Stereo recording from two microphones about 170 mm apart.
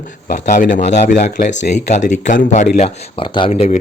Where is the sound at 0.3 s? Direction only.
60° left (ahead or behind).